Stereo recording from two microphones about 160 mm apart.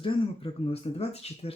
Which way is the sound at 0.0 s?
35° left (ahead or behind).